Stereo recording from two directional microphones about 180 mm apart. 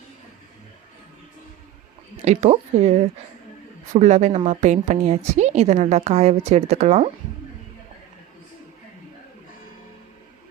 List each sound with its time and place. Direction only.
2.2 s a woman's voice: 40° right (ahead or behind)